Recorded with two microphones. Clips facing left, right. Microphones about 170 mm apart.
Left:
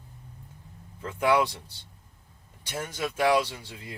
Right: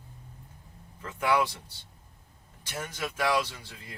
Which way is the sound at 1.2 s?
20° left (ahead or behind).